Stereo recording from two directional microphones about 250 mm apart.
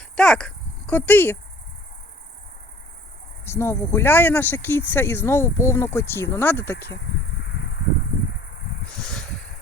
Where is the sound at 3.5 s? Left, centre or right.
Centre.